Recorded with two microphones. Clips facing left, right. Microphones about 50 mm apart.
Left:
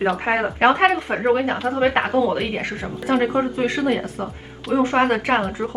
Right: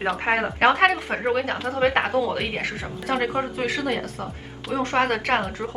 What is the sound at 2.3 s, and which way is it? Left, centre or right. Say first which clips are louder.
Speech: left 3 dB; centre.